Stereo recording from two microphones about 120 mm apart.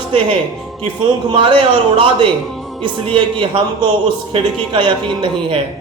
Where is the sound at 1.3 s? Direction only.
45° right (ahead or behind).